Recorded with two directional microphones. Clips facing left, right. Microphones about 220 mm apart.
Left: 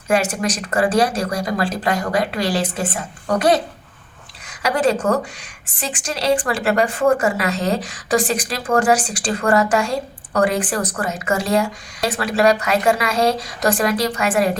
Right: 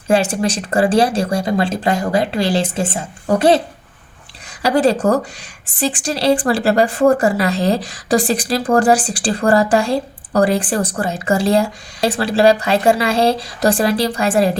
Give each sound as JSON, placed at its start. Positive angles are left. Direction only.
{"t": 0.1, "sound": "speech", "side_deg": -30}
{"t": 4.6, "sound": "speech", "side_deg": -35}